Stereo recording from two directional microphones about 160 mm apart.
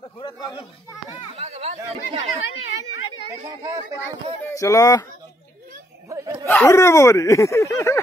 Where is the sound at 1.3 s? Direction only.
40° right (ahead or behind).